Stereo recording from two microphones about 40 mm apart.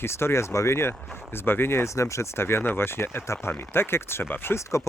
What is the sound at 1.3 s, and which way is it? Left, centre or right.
Speech, left.